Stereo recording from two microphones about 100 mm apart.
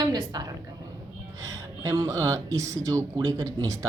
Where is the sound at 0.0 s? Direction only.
45° right (ahead or behind).